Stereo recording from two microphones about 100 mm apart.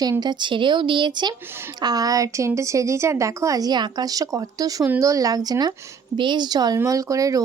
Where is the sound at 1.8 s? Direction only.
40° right (ahead or behind).